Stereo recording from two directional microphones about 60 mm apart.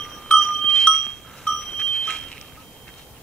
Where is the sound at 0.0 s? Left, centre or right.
Centre.